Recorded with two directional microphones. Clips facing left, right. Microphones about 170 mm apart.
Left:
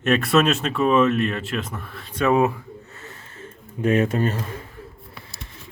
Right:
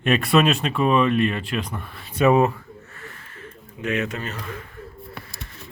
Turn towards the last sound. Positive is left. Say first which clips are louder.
# left 8 dB
turn(degrees=30)  # may be behind; listen again after turning